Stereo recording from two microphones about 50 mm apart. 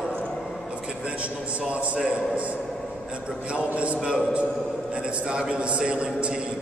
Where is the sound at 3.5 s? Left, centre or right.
Right.